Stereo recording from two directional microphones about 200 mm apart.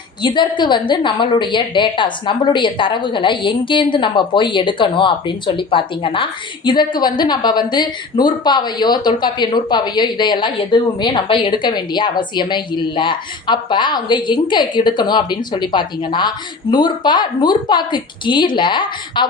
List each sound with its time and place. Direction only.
0.2 s a woman's voice: 25° left (ahead or behind)